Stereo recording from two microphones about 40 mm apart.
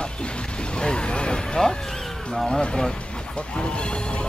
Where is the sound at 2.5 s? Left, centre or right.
Left.